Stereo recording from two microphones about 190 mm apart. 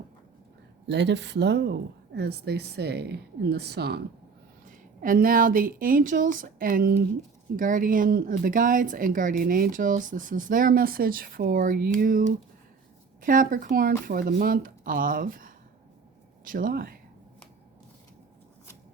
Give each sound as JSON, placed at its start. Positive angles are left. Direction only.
{"t": 0.9, "sound": "speech", "side_deg": -65}
{"t": 4.6, "sound": "speech", "side_deg": -45}
{"t": 13.2, "sound": "speech", "side_deg": -45}